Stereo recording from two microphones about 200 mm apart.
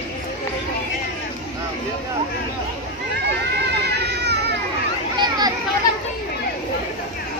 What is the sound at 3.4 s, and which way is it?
Children playing, 55° right (ahead or behind).